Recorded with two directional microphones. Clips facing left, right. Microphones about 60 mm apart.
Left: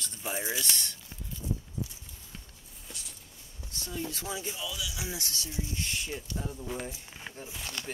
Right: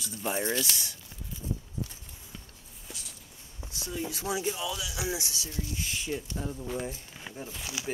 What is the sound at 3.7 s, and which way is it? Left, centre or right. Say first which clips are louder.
Speech: right 2 dB; centre.